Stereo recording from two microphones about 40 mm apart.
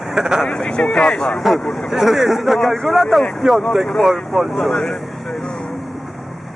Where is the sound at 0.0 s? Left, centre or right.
Centre.